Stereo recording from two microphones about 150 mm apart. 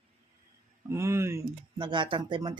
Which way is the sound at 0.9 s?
20° right (ahead or behind).